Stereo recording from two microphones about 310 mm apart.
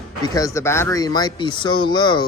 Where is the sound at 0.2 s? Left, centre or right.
Centre.